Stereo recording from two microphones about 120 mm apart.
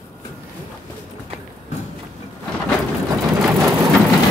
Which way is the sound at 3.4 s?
20° right (ahead or behind).